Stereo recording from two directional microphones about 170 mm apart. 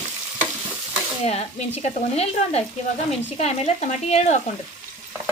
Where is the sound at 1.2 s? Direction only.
35° left (ahead or behind).